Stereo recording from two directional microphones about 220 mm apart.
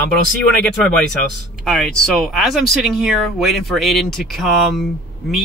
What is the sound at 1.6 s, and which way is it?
Speech, centre (ahead or behind).